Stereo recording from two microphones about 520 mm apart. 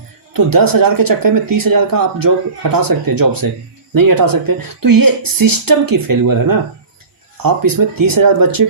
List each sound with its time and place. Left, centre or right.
0.3 s speech: right